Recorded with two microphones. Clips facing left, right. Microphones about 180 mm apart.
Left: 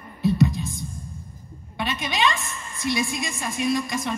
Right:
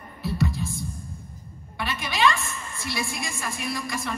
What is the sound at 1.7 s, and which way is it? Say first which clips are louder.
A woman's voice: left 2 dB; 20° left (ahead or behind).